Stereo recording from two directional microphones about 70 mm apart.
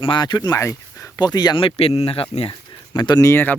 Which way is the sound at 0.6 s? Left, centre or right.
Left.